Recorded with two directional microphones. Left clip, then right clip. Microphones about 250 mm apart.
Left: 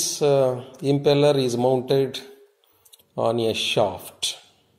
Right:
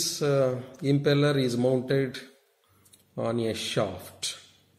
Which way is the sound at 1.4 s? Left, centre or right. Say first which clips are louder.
Left 5 dB; centre.